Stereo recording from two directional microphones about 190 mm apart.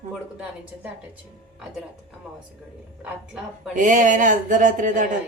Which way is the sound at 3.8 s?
40° right (ahead or behind).